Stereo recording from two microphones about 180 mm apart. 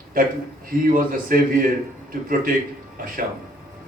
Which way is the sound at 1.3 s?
55° right (ahead or behind).